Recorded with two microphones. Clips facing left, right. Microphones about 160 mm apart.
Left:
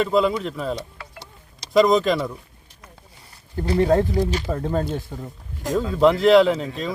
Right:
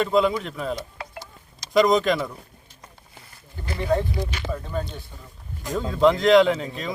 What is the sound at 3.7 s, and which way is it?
Speech, 40° left (ahead or behind).